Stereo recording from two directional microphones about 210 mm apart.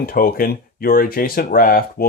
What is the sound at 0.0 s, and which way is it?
Speech, 45° left (ahead or behind).